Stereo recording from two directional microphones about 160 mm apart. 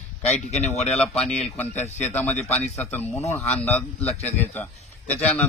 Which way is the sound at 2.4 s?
10° left (ahead or behind).